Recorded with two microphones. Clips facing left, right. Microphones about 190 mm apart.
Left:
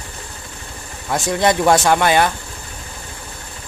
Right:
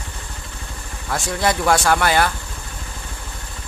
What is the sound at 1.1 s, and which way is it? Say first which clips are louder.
Speech: left 4 dB; 20° left (ahead or behind).